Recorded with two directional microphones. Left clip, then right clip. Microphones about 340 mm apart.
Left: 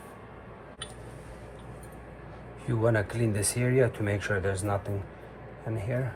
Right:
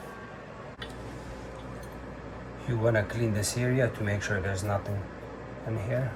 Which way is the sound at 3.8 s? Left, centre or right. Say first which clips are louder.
Left 5 dB; left.